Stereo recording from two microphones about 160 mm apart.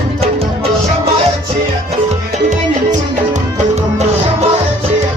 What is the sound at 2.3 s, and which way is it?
Music, 50° right (ahead or behind).